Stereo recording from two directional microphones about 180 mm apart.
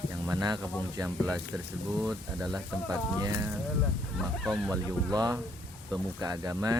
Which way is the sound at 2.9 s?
20° right (ahead or behind).